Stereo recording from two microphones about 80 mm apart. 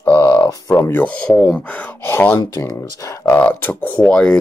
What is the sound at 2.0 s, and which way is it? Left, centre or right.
Speech, left.